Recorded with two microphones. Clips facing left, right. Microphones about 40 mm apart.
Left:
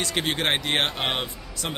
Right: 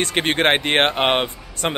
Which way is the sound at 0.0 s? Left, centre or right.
Right.